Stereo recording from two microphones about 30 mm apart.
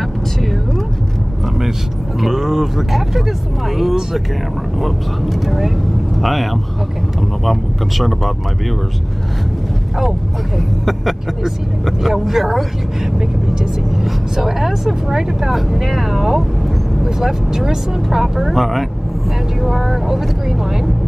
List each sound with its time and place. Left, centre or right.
2.1 s speech: centre
2.9 s speech: centre
8.0 s speech: centre
11.8 s speech: centre
13.2 s speech: right
13.8 s speech: centre